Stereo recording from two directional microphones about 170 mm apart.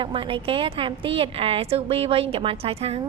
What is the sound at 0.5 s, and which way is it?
A woman's voice, 30° right (ahead or behind).